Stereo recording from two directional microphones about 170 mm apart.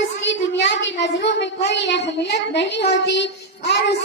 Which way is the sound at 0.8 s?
90° left.